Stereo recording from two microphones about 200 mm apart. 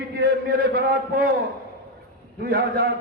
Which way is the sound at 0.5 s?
50° right (ahead or behind).